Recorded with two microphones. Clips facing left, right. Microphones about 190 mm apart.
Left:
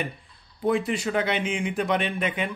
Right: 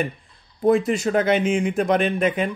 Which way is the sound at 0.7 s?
45° right (ahead or behind).